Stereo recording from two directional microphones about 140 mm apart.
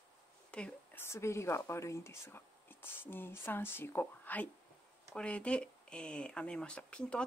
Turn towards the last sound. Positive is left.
turn(degrees=10)  # may be behind; listen again after turning